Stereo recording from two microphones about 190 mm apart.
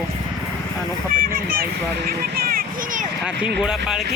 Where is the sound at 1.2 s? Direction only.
50° right (ahead or behind).